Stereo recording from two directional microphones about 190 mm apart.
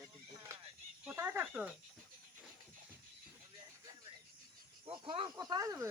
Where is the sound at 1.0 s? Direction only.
10° right (ahead or behind).